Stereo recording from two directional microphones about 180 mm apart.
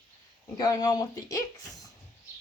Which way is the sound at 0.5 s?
20° left (ahead or behind).